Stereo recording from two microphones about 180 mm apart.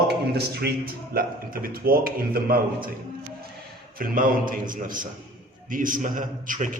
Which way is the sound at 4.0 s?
50° right (ahead or behind).